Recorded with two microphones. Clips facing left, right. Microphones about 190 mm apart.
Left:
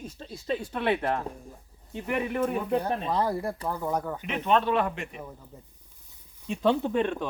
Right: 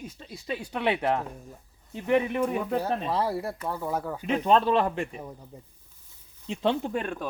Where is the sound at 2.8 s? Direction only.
5° right (ahead or behind).